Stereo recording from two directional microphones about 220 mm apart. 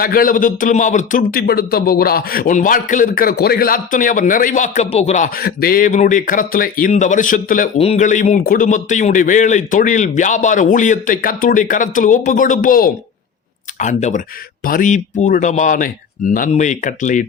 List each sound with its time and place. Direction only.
0.0 s speech: 40° left (ahead or behind)